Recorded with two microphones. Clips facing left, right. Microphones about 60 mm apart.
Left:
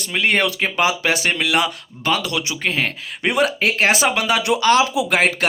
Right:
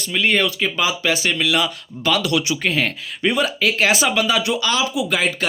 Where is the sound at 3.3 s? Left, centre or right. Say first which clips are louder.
Left 1 dB; left.